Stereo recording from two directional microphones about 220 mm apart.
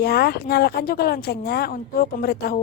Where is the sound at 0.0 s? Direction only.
45° left (ahead or behind).